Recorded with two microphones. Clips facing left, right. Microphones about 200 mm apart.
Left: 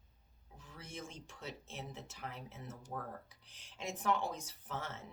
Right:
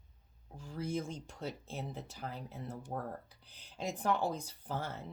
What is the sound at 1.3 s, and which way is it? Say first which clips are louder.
Speech: right 5 dB; 35° right (ahead or behind).